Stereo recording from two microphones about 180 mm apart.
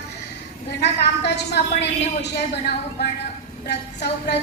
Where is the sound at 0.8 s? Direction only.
70° left (ahead or behind).